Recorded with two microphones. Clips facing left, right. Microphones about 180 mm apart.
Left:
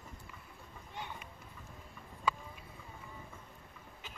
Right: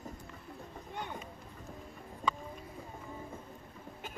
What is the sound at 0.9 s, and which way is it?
Children playing, 50° right (ahead or behind).